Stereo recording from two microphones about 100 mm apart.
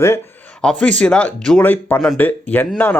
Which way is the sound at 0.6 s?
10° left (ahead or behind).